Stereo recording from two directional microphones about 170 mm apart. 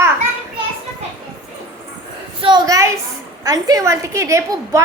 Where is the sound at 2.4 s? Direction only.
25° right (ahead or behind).